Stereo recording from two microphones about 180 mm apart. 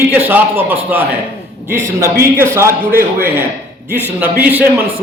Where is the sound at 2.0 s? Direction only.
15° right (ahead or behind).